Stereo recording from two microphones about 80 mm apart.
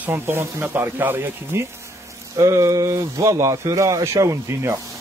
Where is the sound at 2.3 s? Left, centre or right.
Right.